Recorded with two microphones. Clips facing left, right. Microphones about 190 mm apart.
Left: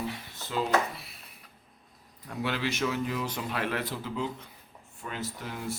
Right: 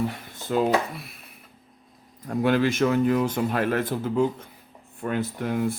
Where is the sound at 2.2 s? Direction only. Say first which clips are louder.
Right 10 dB; 45° right (ahead or behind).